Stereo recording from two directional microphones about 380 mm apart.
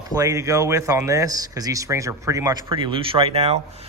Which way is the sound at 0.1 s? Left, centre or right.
Centre.